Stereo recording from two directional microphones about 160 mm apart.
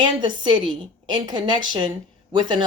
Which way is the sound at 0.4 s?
30° right (ahead or behind).